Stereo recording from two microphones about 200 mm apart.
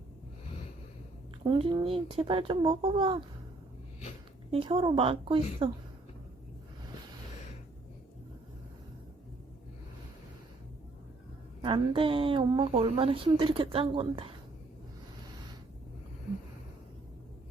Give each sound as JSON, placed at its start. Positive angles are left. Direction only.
{"t": 1.5, "sound": "a woman's voice", "side_deg": -25}
{"t": 4.5, "sound": "a woman's voice", "side_deg": -25}
{"t": 11.6, "sound": "a woman's voice", "side_deg": -25}